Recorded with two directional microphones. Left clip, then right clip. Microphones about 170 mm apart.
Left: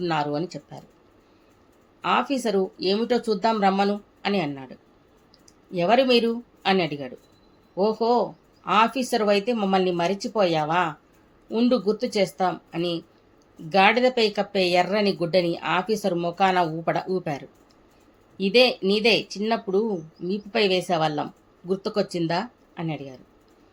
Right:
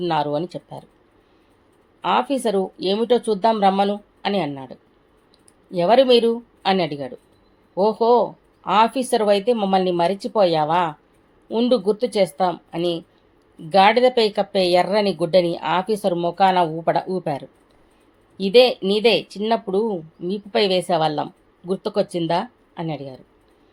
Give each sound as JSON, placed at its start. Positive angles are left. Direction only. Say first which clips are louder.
{"t": 0.0, "sound": "speech", "louder": "right 4 dB", "side_deg": -20}
{"t": 2.0, "sound": "speech", "louder": "right 3 dB", "side_deg": -20}